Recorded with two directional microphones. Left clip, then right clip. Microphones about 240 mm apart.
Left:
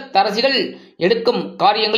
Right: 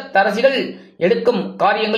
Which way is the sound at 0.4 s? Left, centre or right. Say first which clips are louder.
Right 2 dB; left.